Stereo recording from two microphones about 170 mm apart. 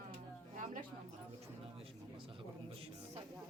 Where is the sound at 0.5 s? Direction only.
50° right (ahead or behind).